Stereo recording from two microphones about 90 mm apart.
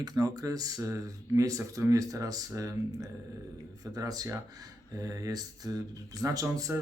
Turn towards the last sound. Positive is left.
turn(degrees=-35)  # may be behind; listen again after turning